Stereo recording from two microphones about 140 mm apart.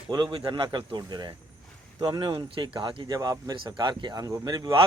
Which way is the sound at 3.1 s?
25° right (ahead or behind).